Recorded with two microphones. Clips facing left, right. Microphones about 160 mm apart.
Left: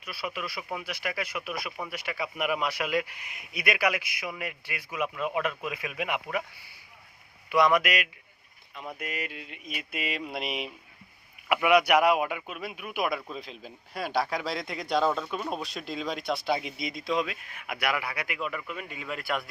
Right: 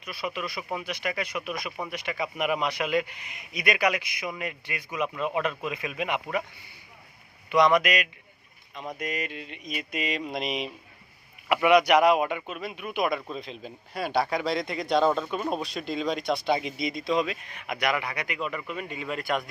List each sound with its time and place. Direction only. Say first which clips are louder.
0.0 s a man's voice: right 2 dB; 5° left (ahead or behind)
7.5 s a man's voice: right 2 dB; 10° left (ahead or behind)
8.7 s speech: right 3 dB; 20° right (ahead or behind)
9.0 s a man's voice: right 5 dB; 10° left (ahead or behind)